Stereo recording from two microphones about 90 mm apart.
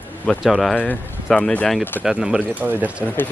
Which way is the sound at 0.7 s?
15° left (ahead or behind).